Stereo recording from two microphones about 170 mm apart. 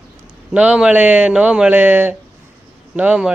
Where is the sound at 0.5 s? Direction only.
5° right (ahead or behind).